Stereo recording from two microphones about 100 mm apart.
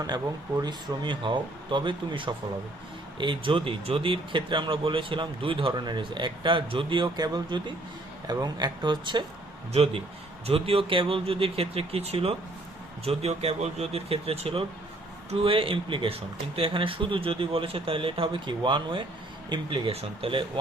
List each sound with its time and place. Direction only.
0.6 s speech: 50° right (ahead or behind)
7.2 s speech: 45° right (ahead or behind)
9.7 s speech: 75° right (ahead or behind)
13.1 s speech: 90° right; by 19.9 s 55° right (ahead or behind)
19.9 s speech: 75° right (ahead or behind)